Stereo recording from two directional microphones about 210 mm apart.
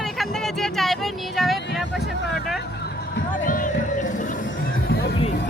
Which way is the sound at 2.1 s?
55° left (ahead or behind).